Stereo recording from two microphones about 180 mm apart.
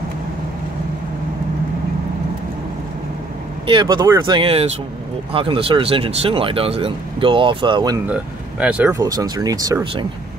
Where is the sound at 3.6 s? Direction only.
25° right (ahead or behind).